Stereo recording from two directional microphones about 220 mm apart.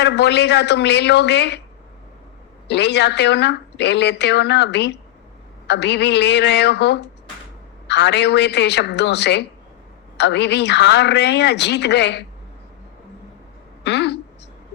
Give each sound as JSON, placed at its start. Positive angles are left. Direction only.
{"t": 0.0, "sound": "speech", "side_deg": 50}
{"t": 2.6, "sound": "speech", "side_deg": 50}
{"t": 13.8, "sound": "speech", "side_deg": 50}